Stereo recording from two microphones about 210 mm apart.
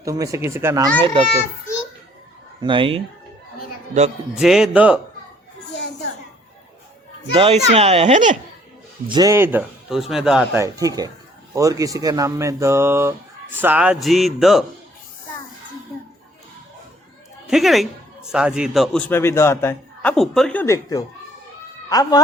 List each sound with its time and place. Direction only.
0.0 s speech: 15° right (ahead or behind)
1.0 s a child's voice: 25° right (ahead or behind)
2.6 s a child's voice: 25° right (ahead or behind)
4.4 s a man's voice: centre (ahead or behind)
7.3 s a child's voice: 25° right (ahead or behind)
9.0 s speech: 20° right (ahead or behind); by 10.6 s centre (ahead or behind)
10.6 s speech: 15° right (ahead or behind)
17.5 s a man's voice: centre (ahead or behind); by 22.2 s 20° left (ahead or behind)